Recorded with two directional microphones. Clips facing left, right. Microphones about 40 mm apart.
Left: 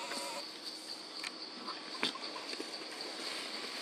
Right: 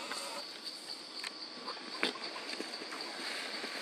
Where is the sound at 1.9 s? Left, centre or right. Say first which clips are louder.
Right 2 dB; centre.